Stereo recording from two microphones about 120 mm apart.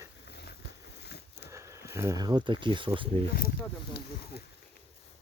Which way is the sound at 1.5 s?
25° right (ahead or behind).